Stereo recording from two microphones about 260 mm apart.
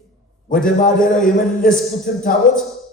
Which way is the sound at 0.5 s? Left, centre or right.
Left.